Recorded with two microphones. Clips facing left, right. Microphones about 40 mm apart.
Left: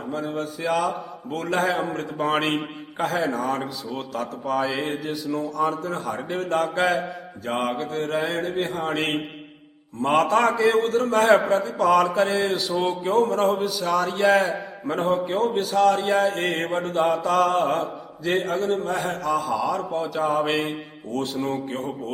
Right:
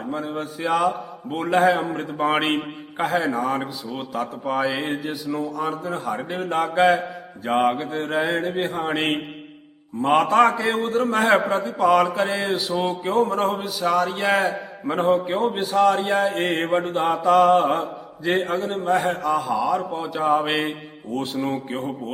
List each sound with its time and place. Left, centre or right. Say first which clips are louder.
0.1 s a man's voice: left 1 dB; centre
1.5 s a man's voice: right 5 dB; centre
2.0 s a man's voice: right 2 dB; centre
2.4 s a man's voice: right 2 dB; centre
15.4 s a man's voice: right 1 dB; centre